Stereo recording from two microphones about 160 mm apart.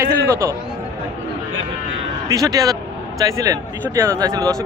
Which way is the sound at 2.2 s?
20° right (ahead or behind).